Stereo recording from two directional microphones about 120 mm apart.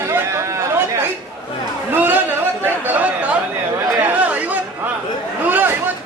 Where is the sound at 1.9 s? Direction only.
15° right (ahead or behind).